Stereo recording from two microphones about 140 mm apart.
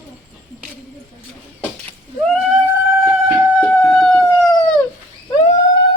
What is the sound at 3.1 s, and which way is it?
Chicken, 15° right (ahead or behind).